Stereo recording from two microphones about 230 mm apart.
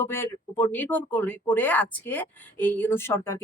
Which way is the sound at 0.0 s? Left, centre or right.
Centre.